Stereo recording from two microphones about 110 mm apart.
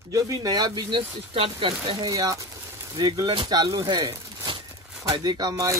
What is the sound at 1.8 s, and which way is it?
Speech, 40° right (ahead or behind).